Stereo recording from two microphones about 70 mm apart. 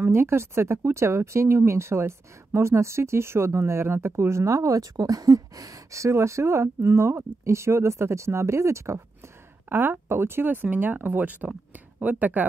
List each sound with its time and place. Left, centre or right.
0.0 s speech: right
9.7 s speech: right